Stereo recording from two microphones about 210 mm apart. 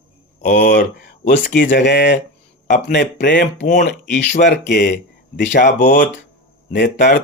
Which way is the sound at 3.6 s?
35° left (ahead or behind).